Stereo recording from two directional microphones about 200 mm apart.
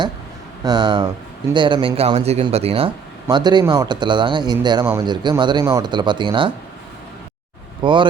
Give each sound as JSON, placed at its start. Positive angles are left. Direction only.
{"t": 0.6, "sound": "speech", "side_deg": -20}
{"t": 7.8, "sound": "speech", "side_deg": -25}